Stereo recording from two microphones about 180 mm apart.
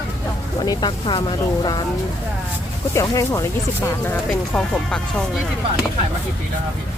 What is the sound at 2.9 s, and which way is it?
Speech, 15° left (ahead or behind).